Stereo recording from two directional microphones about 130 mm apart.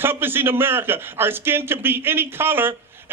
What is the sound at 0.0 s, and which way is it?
A man's voice, 15° right (ahead or behind).